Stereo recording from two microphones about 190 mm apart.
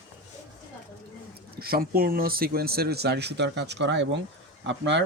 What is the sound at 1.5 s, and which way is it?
Speech, 55° right (ahead or behind).